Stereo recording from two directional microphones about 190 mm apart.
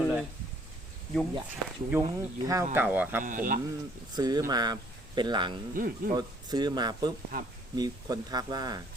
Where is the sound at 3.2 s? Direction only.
45° right (ahead or behind).